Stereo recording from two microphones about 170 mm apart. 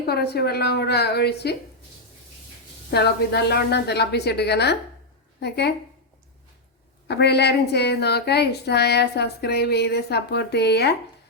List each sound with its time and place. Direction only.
0.0 s a woman's voice: 70° left (ahead or behind)
2.9 s a woman's voice: 75° left (ahead or behind)
7.1 s a woman's voice: 75° left (ahead or behind)